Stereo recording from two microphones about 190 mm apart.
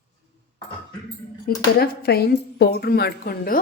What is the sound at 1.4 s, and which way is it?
Speech, 55° left (ahead or behind).